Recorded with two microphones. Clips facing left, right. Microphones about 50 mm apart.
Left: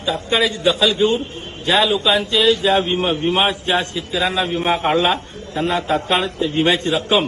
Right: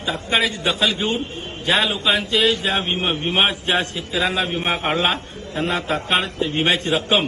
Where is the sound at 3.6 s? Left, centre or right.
Right.